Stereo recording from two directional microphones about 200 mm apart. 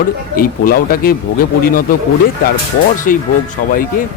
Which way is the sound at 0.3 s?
45° left (ahead or behind).